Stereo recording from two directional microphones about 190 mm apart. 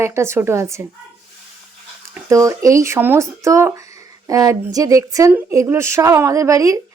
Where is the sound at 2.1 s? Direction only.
15° right (ahead or behind).